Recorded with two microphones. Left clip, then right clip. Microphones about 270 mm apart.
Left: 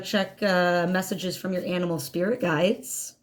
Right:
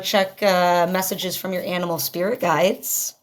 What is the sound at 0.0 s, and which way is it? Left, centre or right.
A woman's voice, right.